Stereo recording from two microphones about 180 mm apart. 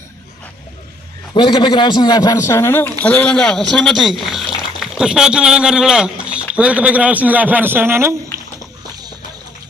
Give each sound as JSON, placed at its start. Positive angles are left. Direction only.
{"t": 1.3, "sound": "a man's voice", "side_deg": 25}